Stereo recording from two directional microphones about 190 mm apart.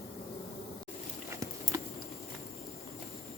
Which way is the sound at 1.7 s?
15° right (ahead or behind).